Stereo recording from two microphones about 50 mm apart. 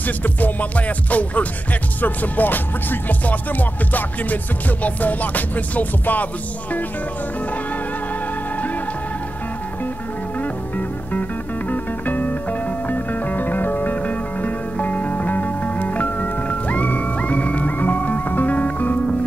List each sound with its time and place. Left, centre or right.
0.0 s music: left
11.7 s music: left